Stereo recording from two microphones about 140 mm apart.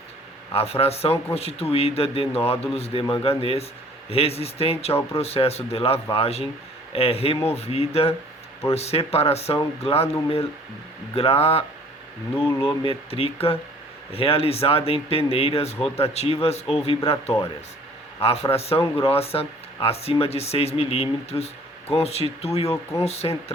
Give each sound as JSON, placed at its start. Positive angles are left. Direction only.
{"t": 0.5, "sound": "speech", "side_deg": 45}
{"t": 12.6, "sound": "speech", "side_deg": 40}
{"t": 18.2, "sound": "a man's voice", "side_deg": 45}
{"t": 22.7, "sound": "speech", "side_deg": 20}
{"t": 23.0, "sound": "speech", "side_deg": 50}